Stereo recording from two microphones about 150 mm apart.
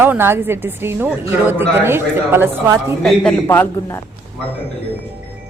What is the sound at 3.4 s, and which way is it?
Speech, 15° left (ahead or behind).